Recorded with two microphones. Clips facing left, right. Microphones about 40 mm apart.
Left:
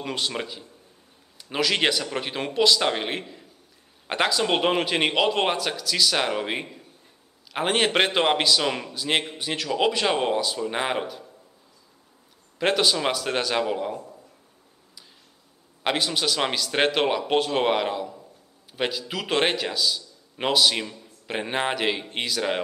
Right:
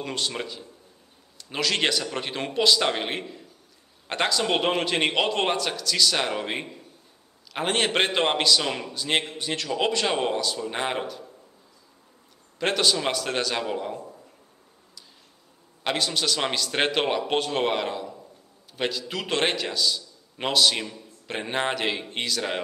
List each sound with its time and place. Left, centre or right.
0.0 s a man's voice: centre
4.1 s a man's voice: centre
8.3 s a man's voice: centre
12.5 s a man's voice: centre
15.8 s a man's voice: centre